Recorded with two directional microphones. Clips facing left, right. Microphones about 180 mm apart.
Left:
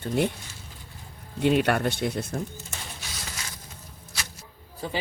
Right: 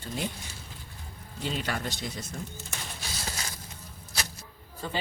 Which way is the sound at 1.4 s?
60° left (ahead or behind).